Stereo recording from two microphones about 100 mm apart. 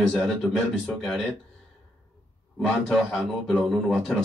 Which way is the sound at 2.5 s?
5° left (ahead or behind).